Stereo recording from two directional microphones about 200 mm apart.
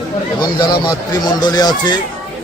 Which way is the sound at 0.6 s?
20° left (ahead or behind).